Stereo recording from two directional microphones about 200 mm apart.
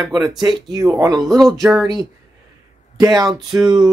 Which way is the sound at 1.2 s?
Centre (ahead or behind).